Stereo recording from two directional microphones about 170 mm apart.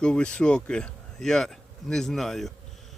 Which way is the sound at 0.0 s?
5° left (ahead or behind).